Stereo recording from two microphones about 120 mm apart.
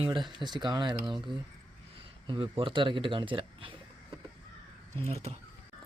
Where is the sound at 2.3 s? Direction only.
45° right (ahead or behind).